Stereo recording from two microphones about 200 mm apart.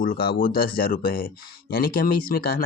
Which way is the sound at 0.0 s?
45° left (ahead or behind).